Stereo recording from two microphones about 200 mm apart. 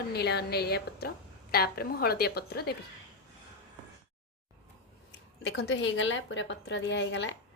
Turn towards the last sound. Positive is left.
turn(degrees=65)  # may be behind; listen again after turning